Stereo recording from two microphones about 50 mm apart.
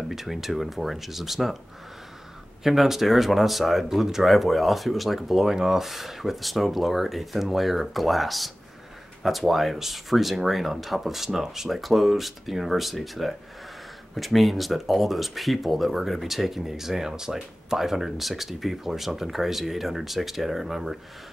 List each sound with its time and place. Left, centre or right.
0.1 s speech: centre
2.6 s speech: centre